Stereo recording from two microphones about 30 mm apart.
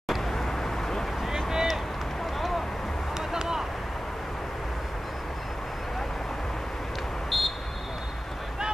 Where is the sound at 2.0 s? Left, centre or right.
Centre.